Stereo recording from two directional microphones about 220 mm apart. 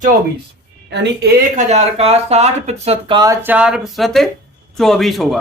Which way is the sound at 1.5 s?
35° right (ahead or behind).